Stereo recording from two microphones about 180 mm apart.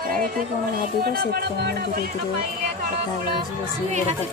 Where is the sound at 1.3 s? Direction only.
60° right (ahead or behind).